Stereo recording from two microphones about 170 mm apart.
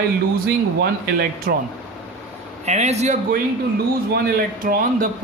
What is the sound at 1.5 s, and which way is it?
Speech, 65° right (ahead or behind).